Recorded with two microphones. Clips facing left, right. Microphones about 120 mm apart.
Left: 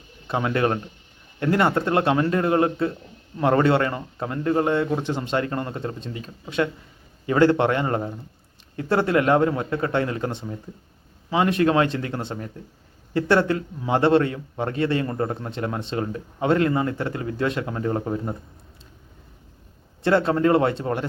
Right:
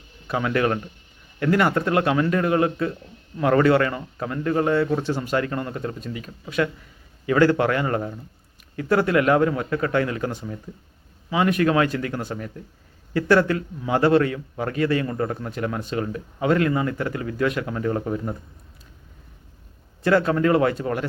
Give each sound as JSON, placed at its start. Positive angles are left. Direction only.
{"t": 0.3, "sound": "a man's voice", "side_deg": 25}
{"t": 20.0, "sound": "a man's voice", "side_deg": 25}